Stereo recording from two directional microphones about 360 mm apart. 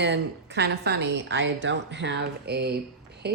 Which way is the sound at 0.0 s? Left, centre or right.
Right.